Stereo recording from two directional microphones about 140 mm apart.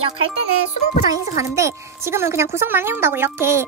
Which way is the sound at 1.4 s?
20° right (ahead or behind).